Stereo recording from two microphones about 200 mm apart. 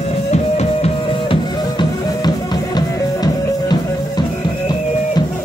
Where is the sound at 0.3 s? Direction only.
30° left (ahead or behind).